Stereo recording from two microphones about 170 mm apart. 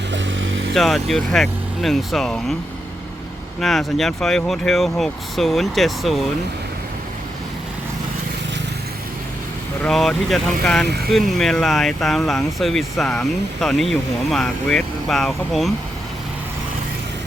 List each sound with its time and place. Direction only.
0.1 s vehicle: 90° right
0.7 s speech: centre (ahead or behind)
3.6 s speech: centre (ahead or behind)
9.8 s speech: centre (ahead or behind)